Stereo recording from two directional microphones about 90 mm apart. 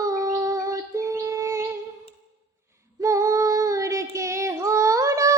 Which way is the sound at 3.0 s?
35° right (ahead or behind).